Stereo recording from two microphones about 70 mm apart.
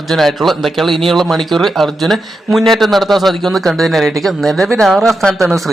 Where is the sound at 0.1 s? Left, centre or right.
Centre.